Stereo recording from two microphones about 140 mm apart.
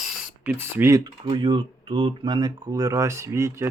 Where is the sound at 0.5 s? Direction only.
15° right (ahead or behind).